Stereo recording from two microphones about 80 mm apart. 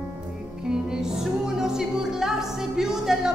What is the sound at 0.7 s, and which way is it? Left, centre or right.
Music, centre.